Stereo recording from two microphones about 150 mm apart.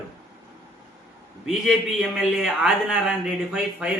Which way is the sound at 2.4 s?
5° right (ahead or behind).